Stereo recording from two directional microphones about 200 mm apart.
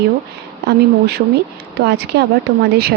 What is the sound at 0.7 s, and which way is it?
Speech, 55° right (ahead or behind).